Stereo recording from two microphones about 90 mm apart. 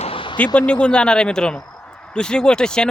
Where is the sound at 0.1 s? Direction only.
70° left (ahead or behind).